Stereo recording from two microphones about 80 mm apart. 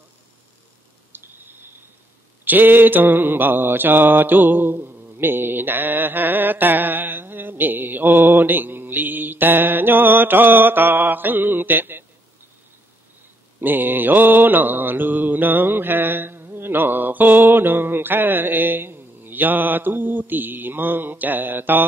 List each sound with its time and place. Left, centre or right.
1.1 s a sound: right
2.4 s mantra: right
13.6 s mantra: right